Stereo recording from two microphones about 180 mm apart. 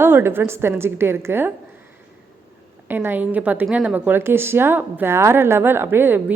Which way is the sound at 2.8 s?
10° right (ahead or behind).